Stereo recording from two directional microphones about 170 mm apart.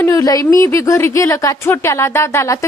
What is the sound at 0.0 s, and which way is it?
A woman's voice, 20° left (ahead or behind).